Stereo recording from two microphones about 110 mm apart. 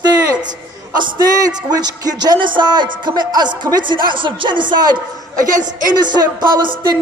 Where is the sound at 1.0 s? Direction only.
35° right (ahead or behind).